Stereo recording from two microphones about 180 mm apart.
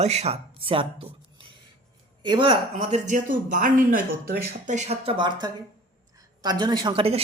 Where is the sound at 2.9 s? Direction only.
45° right (ahead or behind).